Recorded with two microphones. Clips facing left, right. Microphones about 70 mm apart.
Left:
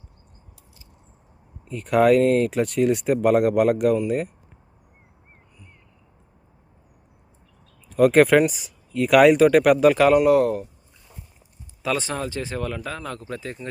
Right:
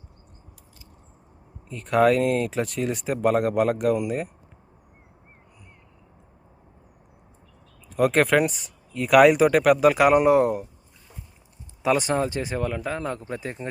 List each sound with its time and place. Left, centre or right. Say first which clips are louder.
1.6 s speech: left 2 dB; centre
7.9 s speech: left 5 dB; centre
10.2 s speech: left 1 dB; right
11.8 s speech: right 4 dB; right